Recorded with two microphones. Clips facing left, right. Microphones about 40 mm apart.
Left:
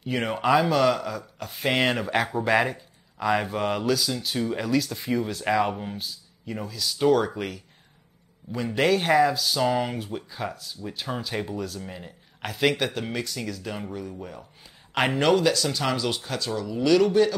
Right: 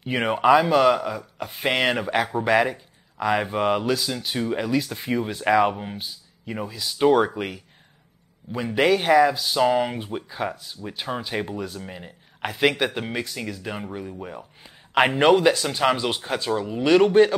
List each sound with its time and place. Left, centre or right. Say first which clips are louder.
0.0 s speech: right 5 dB; right